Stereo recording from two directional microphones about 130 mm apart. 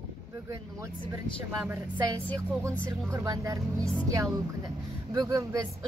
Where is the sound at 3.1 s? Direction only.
25° right (ahead or behind).